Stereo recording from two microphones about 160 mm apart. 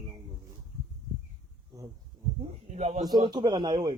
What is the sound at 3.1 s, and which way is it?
Speech, 25° right (ahead or behind).